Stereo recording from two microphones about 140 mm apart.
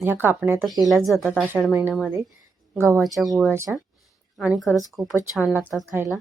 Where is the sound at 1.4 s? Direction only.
10° right (ahead or behind).